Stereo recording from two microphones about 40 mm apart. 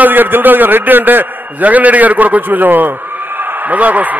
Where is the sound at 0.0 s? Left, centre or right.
Right.